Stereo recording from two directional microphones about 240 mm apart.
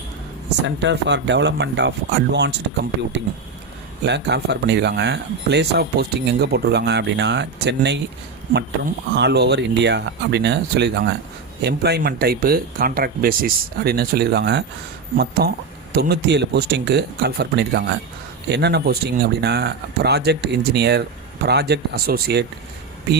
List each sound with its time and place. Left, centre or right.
0.9 s speech: right
4.0 s speech: right